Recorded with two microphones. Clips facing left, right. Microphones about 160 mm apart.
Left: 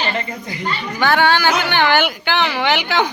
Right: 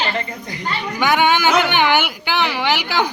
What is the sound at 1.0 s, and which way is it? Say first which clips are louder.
Speech: left 1 dB; 15° right (ahead or behind).